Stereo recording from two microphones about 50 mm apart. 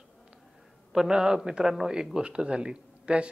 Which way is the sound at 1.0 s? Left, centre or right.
Centre.